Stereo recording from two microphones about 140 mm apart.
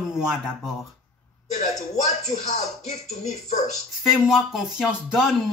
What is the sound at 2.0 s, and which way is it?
Speech, 55° left (ahead or behind).